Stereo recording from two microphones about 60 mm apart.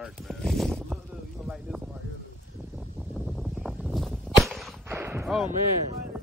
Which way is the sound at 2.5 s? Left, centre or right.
Right.